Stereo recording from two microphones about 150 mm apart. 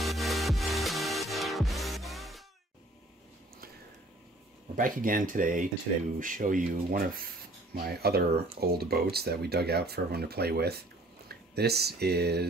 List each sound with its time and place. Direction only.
0.0 s music: centre (ahead or behind)
4.7 s speech: 65° right (ahead or behind)
7.7 s speech: 90° right